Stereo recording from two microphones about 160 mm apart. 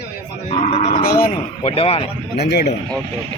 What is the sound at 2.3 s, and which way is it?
Speech, 90° left.